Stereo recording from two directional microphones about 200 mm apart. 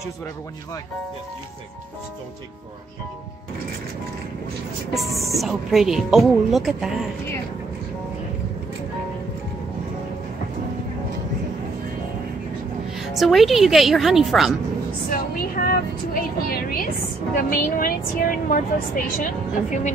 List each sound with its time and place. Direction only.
4.9 s speech: centre (ahead or behind)
12.9 s speech: centre (ahead or behind)
15.0 s a woman's voice: 45° left (ahead or behind)